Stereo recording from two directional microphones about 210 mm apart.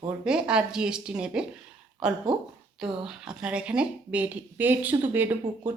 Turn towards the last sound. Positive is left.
turn(degrees=-10)  # may be behind; listen again after turning